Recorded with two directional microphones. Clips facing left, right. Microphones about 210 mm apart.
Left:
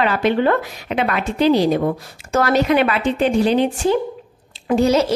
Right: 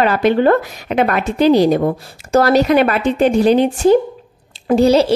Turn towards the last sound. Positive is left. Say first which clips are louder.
# right 4 dB
turn(degrees=-30)  # may be behind; listen again after turning